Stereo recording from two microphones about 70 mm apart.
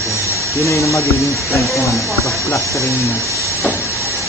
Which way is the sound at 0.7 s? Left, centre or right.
Left.